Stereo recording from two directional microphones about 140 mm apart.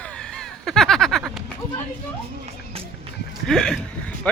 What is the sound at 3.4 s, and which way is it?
Speech, 5° left (ahead or behind).